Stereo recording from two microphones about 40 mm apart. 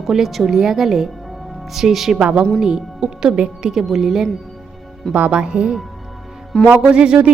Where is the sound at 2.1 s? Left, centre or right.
Right.